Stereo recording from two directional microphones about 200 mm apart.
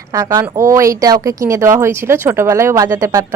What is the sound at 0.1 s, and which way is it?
Speech, 15° right (ahead or behind).